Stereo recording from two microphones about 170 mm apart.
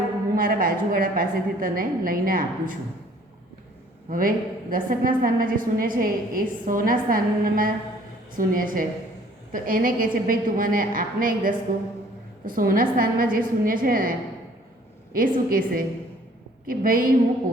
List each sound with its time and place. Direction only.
0.3 s a woman's voice: 55° right (ahead or behind)
4.1 s a woman's voice: 55° right (ahead or behind)
15.1 s a woman's voice: 55° right (ahead or behind)